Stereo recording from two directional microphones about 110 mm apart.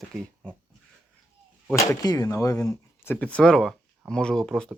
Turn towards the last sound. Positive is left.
turn(degrees=5)  # may be behind; listen again after turning